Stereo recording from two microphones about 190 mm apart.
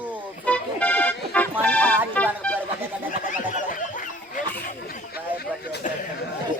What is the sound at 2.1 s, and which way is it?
Speech, 5° left (ahead or behind).